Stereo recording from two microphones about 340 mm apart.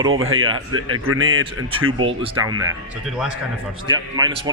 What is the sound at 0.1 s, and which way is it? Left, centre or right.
Speech, right.